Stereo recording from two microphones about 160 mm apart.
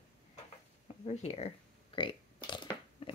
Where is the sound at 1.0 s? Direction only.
45° left (ahead or behind).